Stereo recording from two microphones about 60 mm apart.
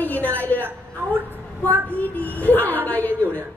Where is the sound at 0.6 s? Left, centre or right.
Right.